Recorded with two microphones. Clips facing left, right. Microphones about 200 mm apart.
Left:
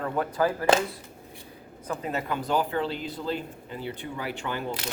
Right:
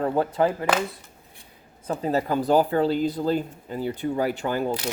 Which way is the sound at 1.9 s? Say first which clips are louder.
Right 6 dB; 35° right (ahead or behind).